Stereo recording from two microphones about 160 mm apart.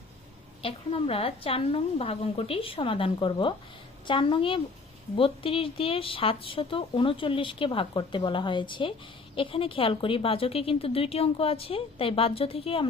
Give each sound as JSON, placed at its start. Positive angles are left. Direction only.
{"t": 0.6, "sound": "speech", "side_deg": 35}